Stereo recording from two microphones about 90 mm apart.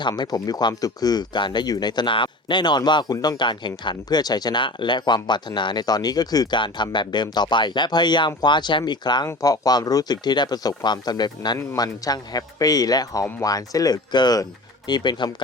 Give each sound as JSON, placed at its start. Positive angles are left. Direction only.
{"t": 0.2, "sound": "a man's voice", "side_deg": 50}
{"t": 9.2, "sound": "a man's voice", "side_deg": 40}